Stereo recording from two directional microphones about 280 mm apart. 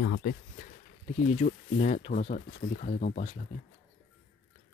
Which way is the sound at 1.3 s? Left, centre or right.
Left.